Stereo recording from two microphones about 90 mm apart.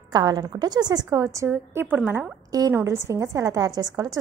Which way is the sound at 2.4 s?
45° right (ahead or behind).